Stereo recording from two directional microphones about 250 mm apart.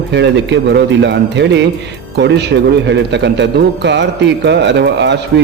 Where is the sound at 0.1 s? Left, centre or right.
Right.